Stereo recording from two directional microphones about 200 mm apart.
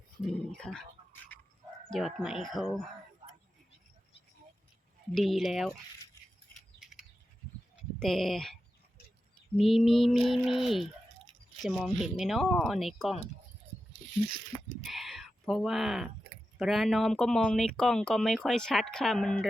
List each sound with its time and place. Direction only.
0.3 s speech: 5° left (ahead or behind)
1.3 s dog: 10° left (ahead or behind)
1.9 s speech: centre (ahead or behind)
5.1 s speech: centre (ahead or behind)
6.7 s chirp: centre (ahead or behind)
7.9 s speech: centre (ahead or behind)
9.6 s speech: centre (ahead or behind)
14.8 s a sound: centre (ahead or behind)
16.6 s speech: centre (ahead or behind)